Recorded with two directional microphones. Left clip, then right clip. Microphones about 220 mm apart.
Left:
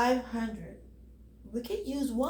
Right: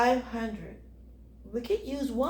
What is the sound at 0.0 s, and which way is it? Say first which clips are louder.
Speech: right 3 dB; 25° right (ahead or behind).